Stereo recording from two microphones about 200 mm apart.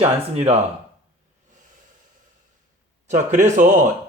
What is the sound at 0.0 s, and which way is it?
Speech, 30° right (ahead or behind).